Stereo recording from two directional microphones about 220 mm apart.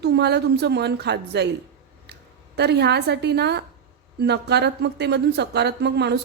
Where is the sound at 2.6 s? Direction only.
50° right (ahead or behind).